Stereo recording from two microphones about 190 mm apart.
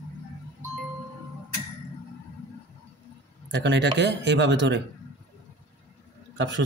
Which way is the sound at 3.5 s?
65° right (ahead or behind).